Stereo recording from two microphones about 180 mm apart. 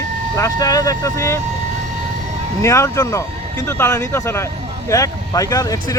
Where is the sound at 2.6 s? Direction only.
15° left (ahead or behind).